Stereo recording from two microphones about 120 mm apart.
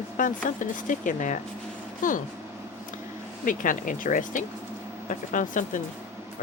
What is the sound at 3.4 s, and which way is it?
Speech, 90° left.